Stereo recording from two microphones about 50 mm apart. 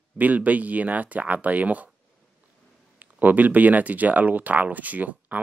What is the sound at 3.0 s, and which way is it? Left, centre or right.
Speech, right.